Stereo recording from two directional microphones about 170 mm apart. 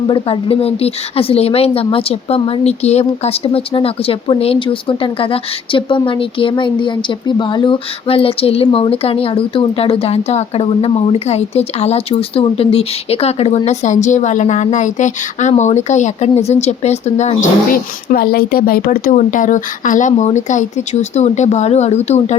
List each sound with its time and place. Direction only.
0.1 s a woman's voice: 35° left (ahead or behind)